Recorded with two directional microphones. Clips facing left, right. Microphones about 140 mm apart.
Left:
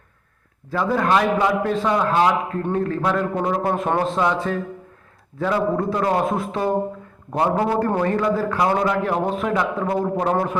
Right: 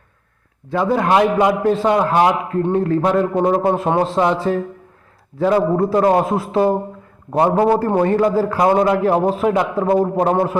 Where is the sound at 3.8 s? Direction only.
20° right (ahead or behind).